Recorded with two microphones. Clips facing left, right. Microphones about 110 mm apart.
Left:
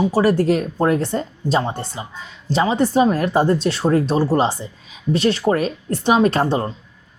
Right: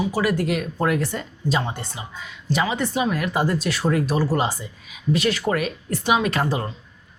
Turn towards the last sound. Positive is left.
turn(degrees=35)  # may be behind; listen again after turning